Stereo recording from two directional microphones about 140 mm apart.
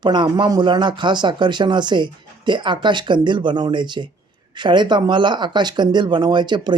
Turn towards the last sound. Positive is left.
turn(degrees=-30)  # may be behind; listen again after turning